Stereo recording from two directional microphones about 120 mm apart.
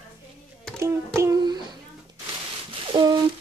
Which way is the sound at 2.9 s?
35° right (ahead or behind).